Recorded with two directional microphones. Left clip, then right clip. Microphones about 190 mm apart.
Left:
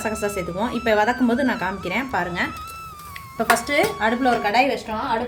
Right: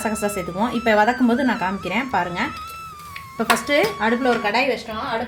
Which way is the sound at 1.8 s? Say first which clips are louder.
Right 1 dB; 15° right (ahead or behind).